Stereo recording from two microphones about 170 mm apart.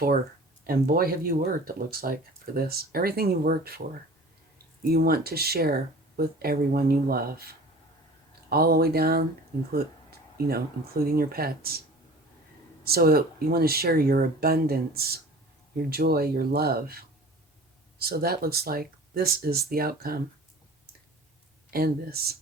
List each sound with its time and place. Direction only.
0.7 s speech: 60° right (ahead or behind)
12.8 s speech: 65° right (ahead or behind)
21.7 s speech: 60° right (ahead or behind)